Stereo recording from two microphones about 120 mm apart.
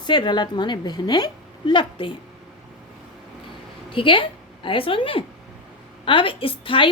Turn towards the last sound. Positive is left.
turn(degrees=45)  # may be behind; listen again after turning